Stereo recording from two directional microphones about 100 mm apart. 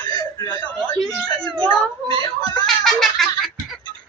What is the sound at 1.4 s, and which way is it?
Speech, 10° left (ahead or behind).